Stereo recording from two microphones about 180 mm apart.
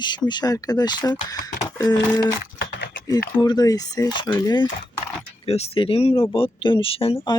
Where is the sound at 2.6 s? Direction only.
75° left (ahead or behind).